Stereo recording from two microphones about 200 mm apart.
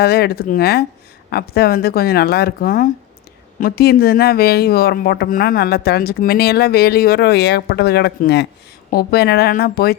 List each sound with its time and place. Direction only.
0.0 s speech: 50° left (ahead or behind)